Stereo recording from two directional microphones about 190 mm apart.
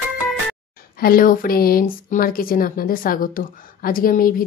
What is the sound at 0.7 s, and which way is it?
Speech, 50° left (ahead or behind).